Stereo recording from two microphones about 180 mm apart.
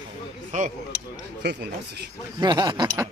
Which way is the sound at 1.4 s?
65° right (ahead or behind).